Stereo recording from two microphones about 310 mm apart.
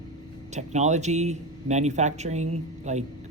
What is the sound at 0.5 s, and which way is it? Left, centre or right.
Speech, right.